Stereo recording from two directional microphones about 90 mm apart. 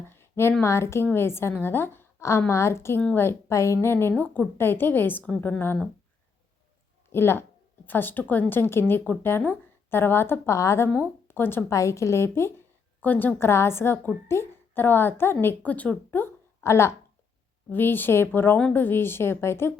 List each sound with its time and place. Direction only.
0.1 s a sound: 30° left (ahead or behind)
0.6 s a woman's voice: 30° left (ahead or behind)
7.1 s a woman's voice: 25° left (ahead or behind)